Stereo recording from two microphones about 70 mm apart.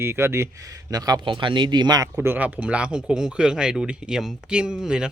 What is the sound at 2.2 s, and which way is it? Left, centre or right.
Speech, right.